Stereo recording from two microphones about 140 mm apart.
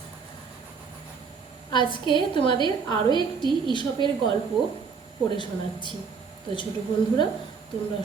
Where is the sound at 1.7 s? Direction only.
35° left (ahead or behind).